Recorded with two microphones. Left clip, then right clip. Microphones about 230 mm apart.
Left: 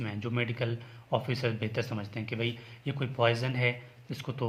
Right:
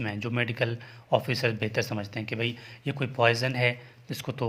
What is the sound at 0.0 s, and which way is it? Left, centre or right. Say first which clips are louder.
Speech: right 4 dB; right.